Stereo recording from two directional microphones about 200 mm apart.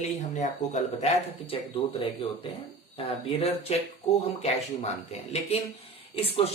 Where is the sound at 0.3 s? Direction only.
35° left (ahead or behind).